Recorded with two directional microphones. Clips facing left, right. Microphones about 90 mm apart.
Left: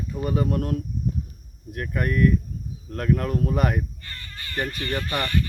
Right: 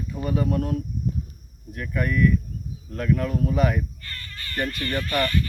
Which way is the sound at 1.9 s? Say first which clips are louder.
Even; 45° left (ahead or behind).